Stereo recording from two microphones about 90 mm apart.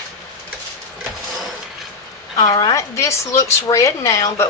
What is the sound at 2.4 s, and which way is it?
Speech, 45° left (ahead or behind).